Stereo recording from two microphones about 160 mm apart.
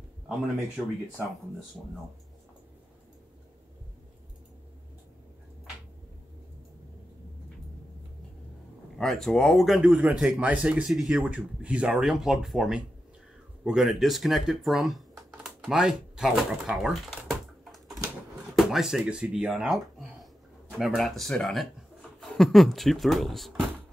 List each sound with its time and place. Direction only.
8.9 s speech: centre (ahead or behind)